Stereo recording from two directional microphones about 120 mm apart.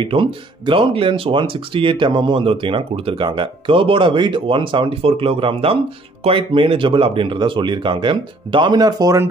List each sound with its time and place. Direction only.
0.0 s speech: 45° right (ahead or behind)